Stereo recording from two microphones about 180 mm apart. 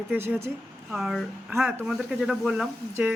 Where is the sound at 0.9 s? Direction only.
Centre (ahead or behind).